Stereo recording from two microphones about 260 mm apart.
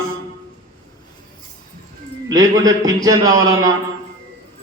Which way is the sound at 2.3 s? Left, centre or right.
Centre.